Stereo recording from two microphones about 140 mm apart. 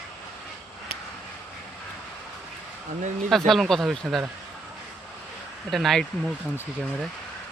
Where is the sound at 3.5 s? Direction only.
Centre (ahead or behind).